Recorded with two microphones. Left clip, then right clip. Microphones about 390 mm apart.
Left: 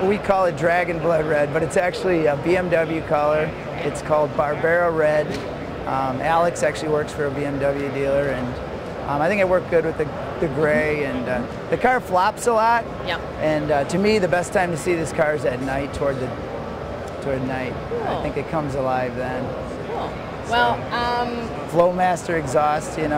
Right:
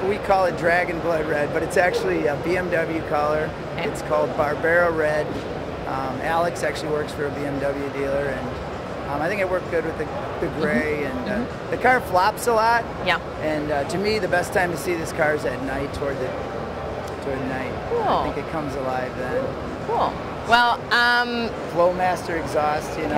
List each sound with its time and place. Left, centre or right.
0.1 s speech: left
9.2 s speech: left
10.6 s speech: left
20.5 s a sound: right
21.7 s speech: left